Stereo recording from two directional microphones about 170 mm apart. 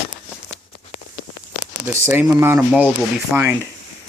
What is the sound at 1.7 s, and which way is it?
Speech, 10° right (ahead or behind).